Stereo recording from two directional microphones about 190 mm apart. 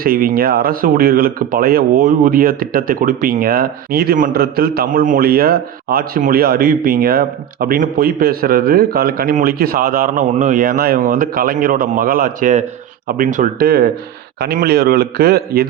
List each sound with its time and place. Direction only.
0.0 s a man's voice: 50° right (ahead or behind)